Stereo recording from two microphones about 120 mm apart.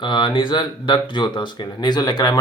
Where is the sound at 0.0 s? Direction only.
40° left (ahead or behind).